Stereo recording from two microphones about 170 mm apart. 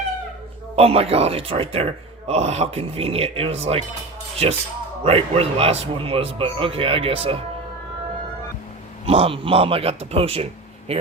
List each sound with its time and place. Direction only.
0.8 s speech: 35° right (ahead or behind)
5.0 s speech: 35° right (ahead or behind)
9.0 s speech: 35° right (ahead or behind)